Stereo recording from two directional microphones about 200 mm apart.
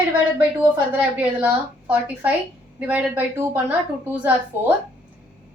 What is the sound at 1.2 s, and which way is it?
A woman's voice, 5° right (ahead or behind).